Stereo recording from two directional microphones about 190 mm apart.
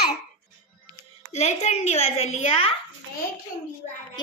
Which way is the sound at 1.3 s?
35° left (ahead or behind).